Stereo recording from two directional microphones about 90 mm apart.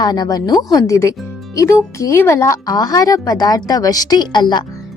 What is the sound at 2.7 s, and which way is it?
A woman's voice, 45° left (ahead or behind).